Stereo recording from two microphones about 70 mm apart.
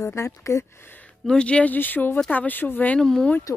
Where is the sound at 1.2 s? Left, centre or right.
Centre; by 3.0 s left.